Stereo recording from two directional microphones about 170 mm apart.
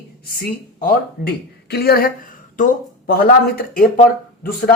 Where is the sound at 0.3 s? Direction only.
60° left (ahead or behind).